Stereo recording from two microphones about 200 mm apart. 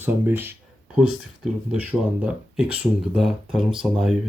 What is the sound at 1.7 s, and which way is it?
Speech, 5° right (ahead or behind).